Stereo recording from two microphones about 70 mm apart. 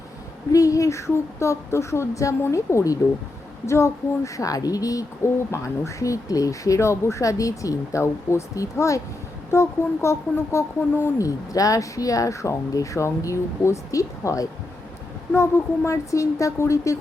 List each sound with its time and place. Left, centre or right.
0.5 s speech: left
5.2 s speech: left
9.5 s speech: left
11.2 s speech: left
15.3 s speech: left